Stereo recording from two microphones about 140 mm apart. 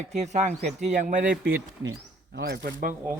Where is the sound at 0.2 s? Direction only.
55° right (ahead or behind).